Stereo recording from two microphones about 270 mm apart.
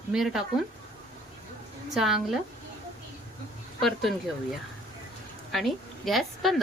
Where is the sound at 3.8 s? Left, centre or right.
Centre.